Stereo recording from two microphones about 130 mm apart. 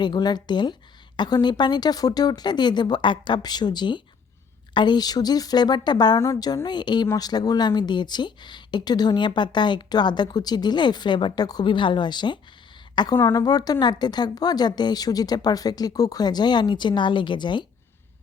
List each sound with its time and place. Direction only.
0.0 s speech: 35° left (ahead or behind)
13.1 s a woman's voice: 20° left (ahead or behind)
13.4 s speech: 30° left (ahead or behind)